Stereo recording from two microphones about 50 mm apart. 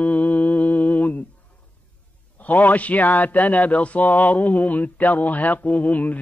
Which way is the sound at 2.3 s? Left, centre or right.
Left.